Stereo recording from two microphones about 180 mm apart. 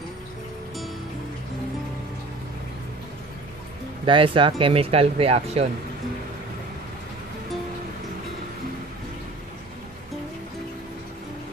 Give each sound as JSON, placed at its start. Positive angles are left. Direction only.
{"t": 4.0, "sound": "speech", "side_deg": -30}